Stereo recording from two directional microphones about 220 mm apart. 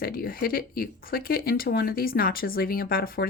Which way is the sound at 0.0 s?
40° left (ahead or behind).